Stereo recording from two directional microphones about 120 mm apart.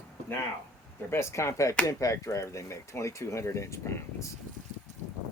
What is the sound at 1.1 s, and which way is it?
Speech, 25° left (ahead or behind).